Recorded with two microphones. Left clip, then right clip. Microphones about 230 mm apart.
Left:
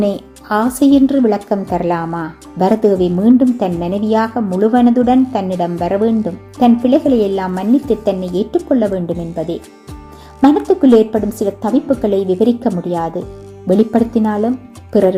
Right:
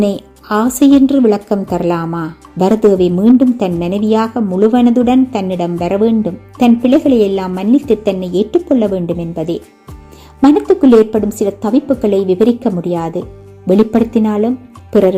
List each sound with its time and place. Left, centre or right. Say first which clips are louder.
0.0 s a woman's voice: right 1 dB; right